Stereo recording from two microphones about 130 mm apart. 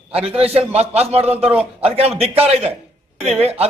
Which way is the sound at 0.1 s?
50° right (ahead or behind).